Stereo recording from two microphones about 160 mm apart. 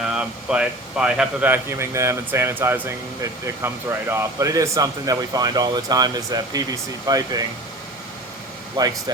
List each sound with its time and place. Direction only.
0.0 s speech: 5° right (ahead or behind); by 7.4 s 25° right (ahead or behind)
8.8 s speech: 25° right (ahead or behind)